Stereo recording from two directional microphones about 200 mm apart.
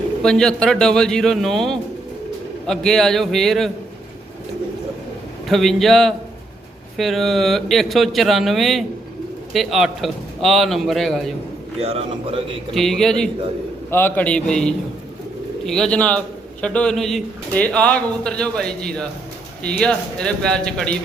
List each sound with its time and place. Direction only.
0.2 s a man's voice: 5° left (ahead or behind)
5.5 s a man's voice: centre (ahead or behind)
11.8 s a man's voice: 30° right (ahead or behind)
12.7 s a man's voice: centre (ahead or behind)